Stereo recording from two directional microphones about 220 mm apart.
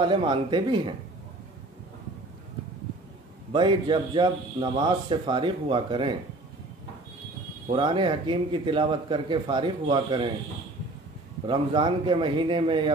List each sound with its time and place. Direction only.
0.0 s a man's voice: 20° right (ahead or behind)
3.5 s a man's voice: 20° right (ahead or behind)
7.6 s a man's voice: 25° right (ahead or behind)
11.4 s a man's voice: 20° right (ahead or behind)